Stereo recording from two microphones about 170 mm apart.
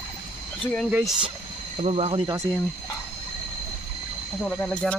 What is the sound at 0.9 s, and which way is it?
Speech, 5° right (ahead or behind).